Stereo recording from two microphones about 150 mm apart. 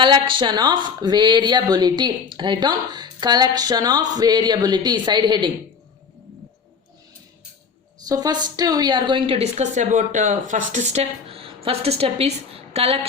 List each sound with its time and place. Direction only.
0.0 s speech: 35° right (ahead or behind)
8.0 s a woman's voice: 25° right (ahead or behind); by 13.1 s 40° right (ahead or behind)